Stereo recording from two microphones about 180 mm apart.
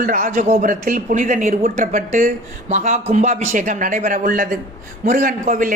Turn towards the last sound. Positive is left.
turn(degrees=-50)  # may be behind; listen again after turning